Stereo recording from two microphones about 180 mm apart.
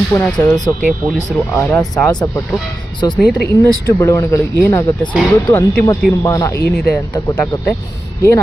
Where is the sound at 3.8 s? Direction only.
15° left (ahead or behind).